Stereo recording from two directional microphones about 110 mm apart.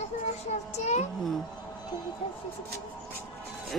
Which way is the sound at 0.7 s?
90° left.